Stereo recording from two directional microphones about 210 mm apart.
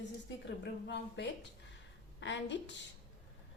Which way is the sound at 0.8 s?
55° left (ahead or behind).